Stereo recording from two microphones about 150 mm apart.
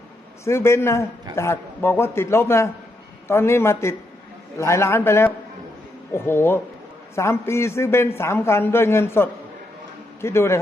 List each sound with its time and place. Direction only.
0.4 s a man's voice: 15° left (ahead or behind)